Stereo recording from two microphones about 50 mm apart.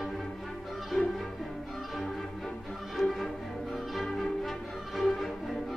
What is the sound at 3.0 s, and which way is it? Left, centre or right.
Music, centre.